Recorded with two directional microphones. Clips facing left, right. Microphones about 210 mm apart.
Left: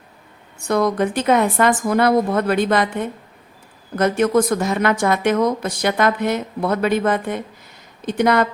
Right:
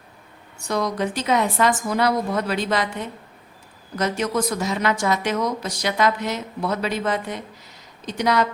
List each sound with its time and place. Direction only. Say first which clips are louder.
0.6 s a woman's voice: left 6 dB; 55° left (ahead or behind)